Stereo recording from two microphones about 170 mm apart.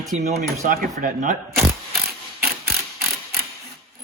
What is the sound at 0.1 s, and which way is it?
Speech, 40° right (ahead or behind).